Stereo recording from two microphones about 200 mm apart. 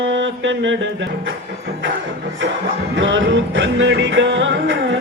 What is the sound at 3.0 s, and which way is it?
Music, 70° right (ahead or behind).